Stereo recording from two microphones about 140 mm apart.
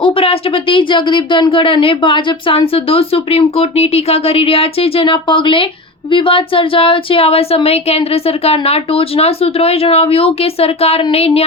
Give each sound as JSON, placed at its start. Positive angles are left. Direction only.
{"t": 0.0, "sound": "speech", "side_deg": 40}